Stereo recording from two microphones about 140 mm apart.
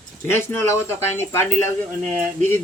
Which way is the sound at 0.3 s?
15° left (ahead or behind).